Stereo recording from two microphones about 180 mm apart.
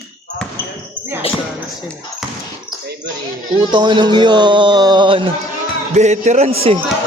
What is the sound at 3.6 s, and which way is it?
Speech, 25° right (ahead or behind).